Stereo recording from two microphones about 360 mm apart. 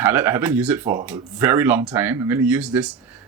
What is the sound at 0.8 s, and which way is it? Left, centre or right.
Speech, centre.